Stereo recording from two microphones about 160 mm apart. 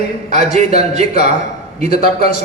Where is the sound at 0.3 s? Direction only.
45° right (ahead or behind).